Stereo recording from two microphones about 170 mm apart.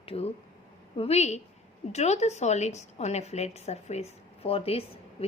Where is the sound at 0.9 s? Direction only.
40° left (ahead or behind).